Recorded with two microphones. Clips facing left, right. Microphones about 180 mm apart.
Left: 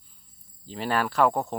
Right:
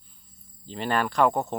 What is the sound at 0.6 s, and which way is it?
Speech, 5° left (ahead or behind).